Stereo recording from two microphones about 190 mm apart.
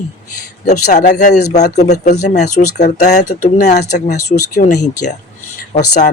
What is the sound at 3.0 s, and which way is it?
Speech, 40° left (ahead or behind).